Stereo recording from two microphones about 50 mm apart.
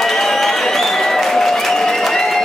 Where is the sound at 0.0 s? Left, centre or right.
Centre.